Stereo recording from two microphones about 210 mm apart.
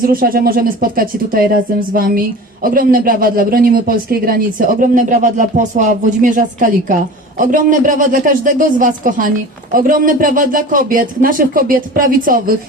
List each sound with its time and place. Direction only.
0.0 s speech: 45° right (ahead or behind)